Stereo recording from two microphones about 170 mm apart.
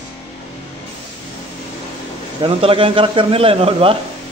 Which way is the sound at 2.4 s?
30° right (ahead or behind).